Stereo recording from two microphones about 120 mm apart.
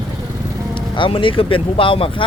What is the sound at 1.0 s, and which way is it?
Speech, 45° left (ahead or behind).